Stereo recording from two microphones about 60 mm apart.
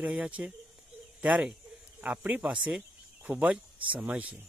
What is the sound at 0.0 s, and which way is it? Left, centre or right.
Speech, right.